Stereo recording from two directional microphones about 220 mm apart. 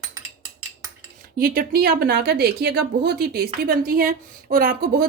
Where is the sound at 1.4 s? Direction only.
40° right (ahead or behind).